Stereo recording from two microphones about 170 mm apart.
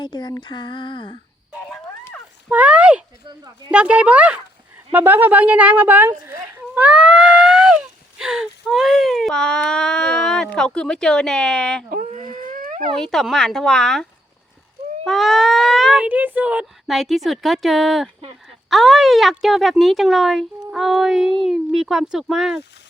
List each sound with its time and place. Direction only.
0.0 s speech: 25° left (ahead or behind)
2.5 s a sound: 10° right (ahead or behind)
3.2 s speech: 25° right (ahead or behind)
3.7 s speech: 5° right (ahead or behind)
6.7 s screaming: 10° right (ahead or behind)
8.2 s speech: 5° right (ahead or behind)
11.9 s a sound: 50° right (ahead or behind)
13.0 s speech: centre (ahead or behind)